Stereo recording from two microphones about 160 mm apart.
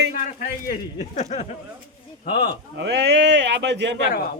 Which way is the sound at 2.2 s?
75° left (ahead or behind).